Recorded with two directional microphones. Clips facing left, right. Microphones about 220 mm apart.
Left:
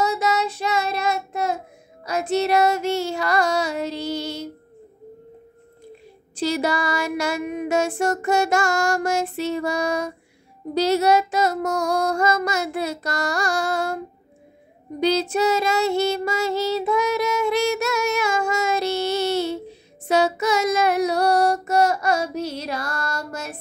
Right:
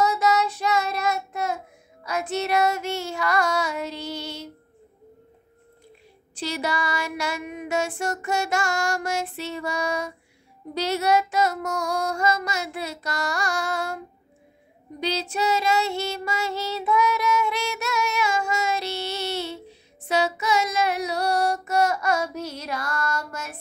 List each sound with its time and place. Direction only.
0.0 s child singing: 25° left (ahead or behind)
2.0 s female singing: 35° left (ahead or behind)
6.4 s music: 45° left (ahead or behind)
15.0 s child singing: 50° left (ahead or behind)
20.1 s female singing: 45° left (ahead or behind)